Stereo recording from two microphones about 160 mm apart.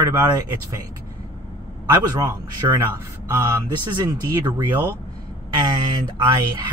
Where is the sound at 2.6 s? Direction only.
25° right (ahead or behind).